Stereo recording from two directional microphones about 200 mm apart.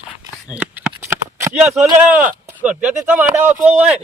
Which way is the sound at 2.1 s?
10° right (ahead or behind).